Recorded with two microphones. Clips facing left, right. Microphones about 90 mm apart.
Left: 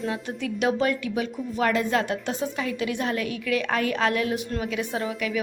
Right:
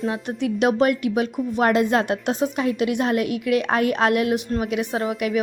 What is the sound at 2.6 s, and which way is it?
Speech, 35° right (ahead or behind).